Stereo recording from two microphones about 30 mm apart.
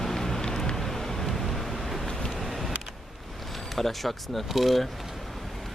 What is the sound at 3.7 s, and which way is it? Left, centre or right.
Speech, centre.